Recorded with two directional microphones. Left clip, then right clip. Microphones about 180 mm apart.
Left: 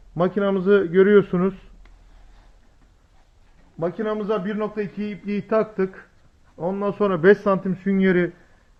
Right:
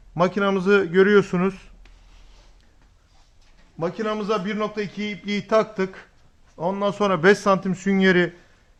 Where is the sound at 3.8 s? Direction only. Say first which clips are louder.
Left 1 dB; 20° right (ahead or behind); by 7.8 s 35° right (ahead or behind).